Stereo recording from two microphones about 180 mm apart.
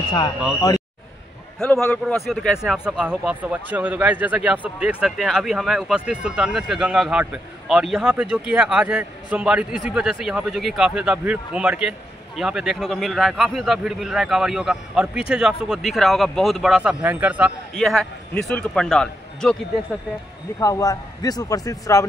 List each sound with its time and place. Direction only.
0.6 s a man's voice: 20° left (ahead or behind)
2.1 s speech: centre (ahead or behind)
17.7 s speech: centre (ahead or behind)
20.6 s a man's voice: 20° left (ahead or behind)